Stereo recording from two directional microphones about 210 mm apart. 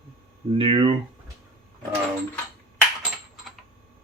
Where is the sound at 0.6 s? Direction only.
25° right (ahead or behind).